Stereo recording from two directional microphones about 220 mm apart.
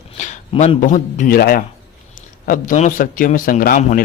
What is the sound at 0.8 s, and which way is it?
A man's voice, 35° left (ahead or behind).